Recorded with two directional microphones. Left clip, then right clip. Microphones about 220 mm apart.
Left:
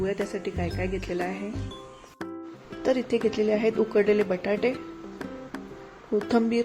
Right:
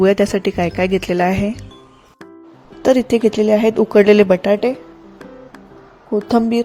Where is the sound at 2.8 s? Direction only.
35° right (ahead or behind).